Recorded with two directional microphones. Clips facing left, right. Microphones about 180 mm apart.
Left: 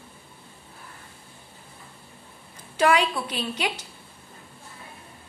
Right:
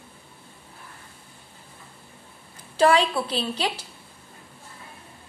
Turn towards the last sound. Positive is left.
turn(degrees=-30)  # may be behind; listen again after turning